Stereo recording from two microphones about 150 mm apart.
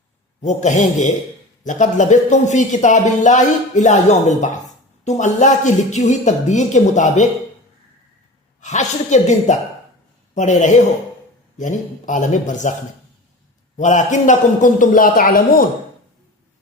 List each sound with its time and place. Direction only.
0.4 s speech: 50° left (ahead or behind)
8.6 s a man's voice: 50° left (ahead or behind)
13.7 s a man's voice: 55° left (ahead or behind); by 15.6 s 70° left (ahead or behind)